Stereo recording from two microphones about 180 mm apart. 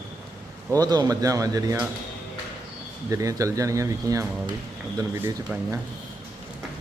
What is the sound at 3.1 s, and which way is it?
A man's voice, 20° right (ahead or behind).